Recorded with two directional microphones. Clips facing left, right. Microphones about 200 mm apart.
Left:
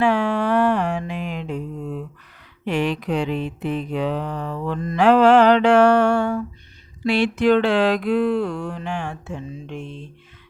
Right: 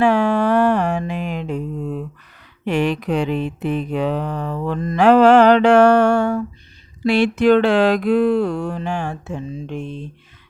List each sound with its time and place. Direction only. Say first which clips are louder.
0.0 s music: right 4 dB; 45° right (ahead or behind)
2.6 s mantra: right 3 dB; 45° right (ahead or behind)
7.0 s speech: right 3 dB; 45° right (ahead or behind)